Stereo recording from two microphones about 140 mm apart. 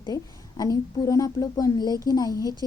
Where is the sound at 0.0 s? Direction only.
30° left (ahead or behind).